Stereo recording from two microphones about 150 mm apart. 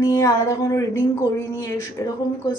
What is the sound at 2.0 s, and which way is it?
Speech, 20° left (ahead or behind).